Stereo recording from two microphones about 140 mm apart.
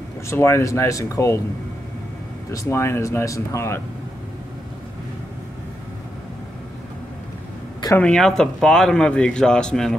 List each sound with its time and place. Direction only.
0.3 s speech: 20° left (ahead or behind)
2.5 s speech: 20° left (ahead or behind)
8.0 s a man's voice: 5° left (ahead or behind)